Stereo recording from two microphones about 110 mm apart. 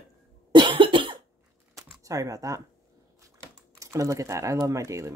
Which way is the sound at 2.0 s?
30° right (ahead or behind).